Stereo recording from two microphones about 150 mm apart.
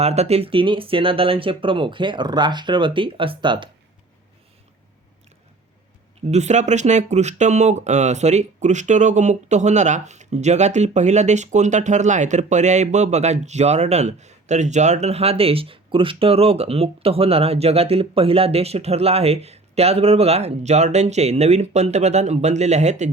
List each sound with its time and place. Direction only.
0.0 s speech: 45° right (ahead or behind)
6.3 s speech: 50° right (ahead or behind)